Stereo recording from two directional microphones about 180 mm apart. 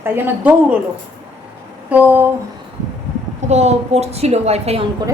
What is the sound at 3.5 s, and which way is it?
A woman's voice, 35° right (ahead or behind).